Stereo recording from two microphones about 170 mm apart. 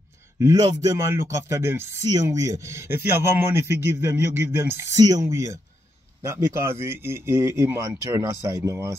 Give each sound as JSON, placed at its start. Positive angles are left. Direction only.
{"t": 0.4, "sound": "speech", "side_deg": -20}